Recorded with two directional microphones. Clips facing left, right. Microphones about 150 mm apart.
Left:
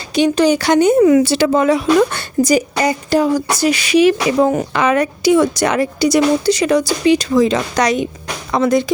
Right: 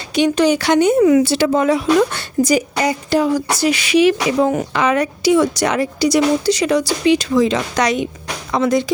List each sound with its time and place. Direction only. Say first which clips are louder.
0.1 s speech: left 1 dB; 35° left (ahead or behind)
1.2 s speech: left 2 dB; 85° left
2.0 s speech: left 2 dB; 45° left (ahead or behind)